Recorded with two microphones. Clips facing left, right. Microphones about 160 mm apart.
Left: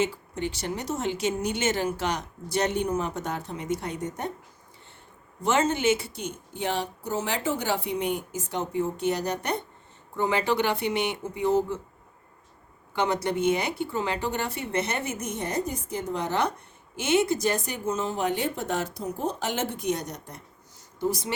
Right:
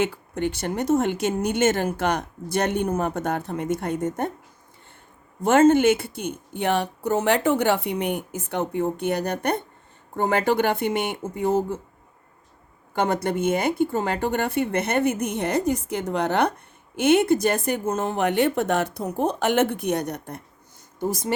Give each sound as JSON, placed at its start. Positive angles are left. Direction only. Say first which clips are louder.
{"t": 0.0, "sound": "speech", "louder": "right 3 dB", "side_deg": -55}
{"t": 5.4, "sound": "a woman's voice", "louder": "right 8 dB", "side_deg": -50}
{"t": 12.9, "sound": "a woman's voice", "louder": "right 3 dB", "side_deg": -50}